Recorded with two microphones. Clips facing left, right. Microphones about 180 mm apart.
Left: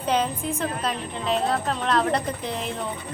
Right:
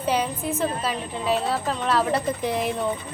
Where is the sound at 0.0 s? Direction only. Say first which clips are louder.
Even; 5° right (ahead or behind).